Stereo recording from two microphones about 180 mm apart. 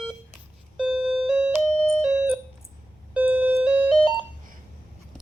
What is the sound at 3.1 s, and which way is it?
Doorbell, 5° right (ahead or behind).